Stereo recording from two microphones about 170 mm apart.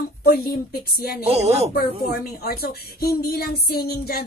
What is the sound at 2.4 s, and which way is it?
Speech, 65° left (ahead or behind).